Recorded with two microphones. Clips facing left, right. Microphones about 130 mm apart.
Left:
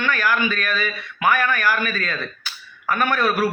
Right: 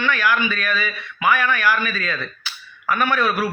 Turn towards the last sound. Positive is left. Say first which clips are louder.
# even
turn(degrees=45)  # may be behind; listen again after turning